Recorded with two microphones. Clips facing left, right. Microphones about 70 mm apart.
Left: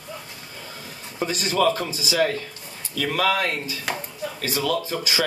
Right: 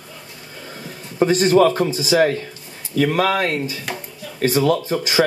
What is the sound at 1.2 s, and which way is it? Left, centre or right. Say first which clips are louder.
Speech: right 8 dB; right.